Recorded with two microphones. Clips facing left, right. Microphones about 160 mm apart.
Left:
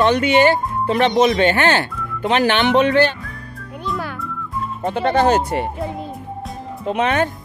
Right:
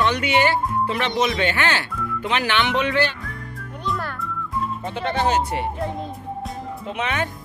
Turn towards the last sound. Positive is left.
turn(degrees=45)  # may be behind; listen again after turning